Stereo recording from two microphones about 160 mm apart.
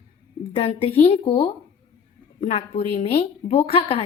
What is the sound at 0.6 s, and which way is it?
A woman's voice, 35° left (ahead or behind).